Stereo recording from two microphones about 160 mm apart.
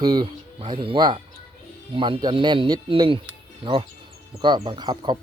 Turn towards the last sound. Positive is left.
turn(degrees=-25)  # may be behind; listen again after turning